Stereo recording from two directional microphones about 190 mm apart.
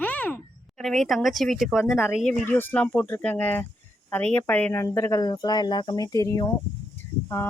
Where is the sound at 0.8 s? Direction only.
Centre (ahead or behind).